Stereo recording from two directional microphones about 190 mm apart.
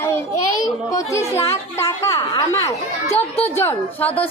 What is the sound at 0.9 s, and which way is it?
A woman's voice, 15° left (ahead or behind).